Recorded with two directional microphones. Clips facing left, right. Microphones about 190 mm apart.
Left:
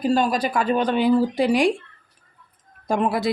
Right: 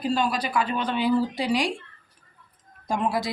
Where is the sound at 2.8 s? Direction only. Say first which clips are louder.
Left 4 dB; 55° left (ahead or behind).